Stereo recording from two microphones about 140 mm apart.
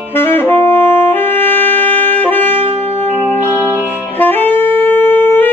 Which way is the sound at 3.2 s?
15° right (ahead or behind).